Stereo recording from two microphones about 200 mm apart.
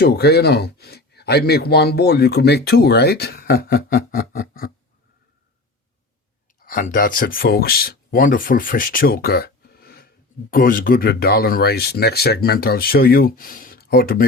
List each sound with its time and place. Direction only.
0.0 s speech: 55° left (ahead or behind)
6.6 s speech: 45° left (ahead or behind)